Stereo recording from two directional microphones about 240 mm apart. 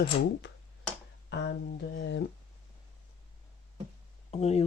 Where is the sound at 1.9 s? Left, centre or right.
Left.